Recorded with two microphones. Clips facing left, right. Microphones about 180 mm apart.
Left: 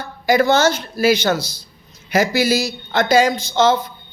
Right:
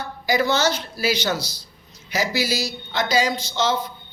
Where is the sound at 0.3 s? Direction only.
50° left (ahead or behind).